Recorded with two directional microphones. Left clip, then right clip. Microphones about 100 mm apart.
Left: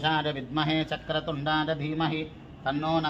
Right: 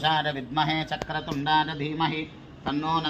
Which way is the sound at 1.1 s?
35° left (ahead or behind).